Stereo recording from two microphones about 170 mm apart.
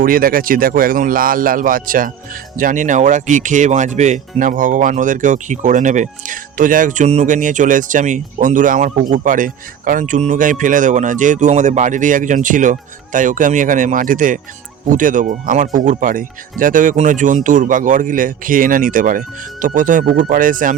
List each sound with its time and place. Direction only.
0.0 s speech: 55° right (ahead or behind)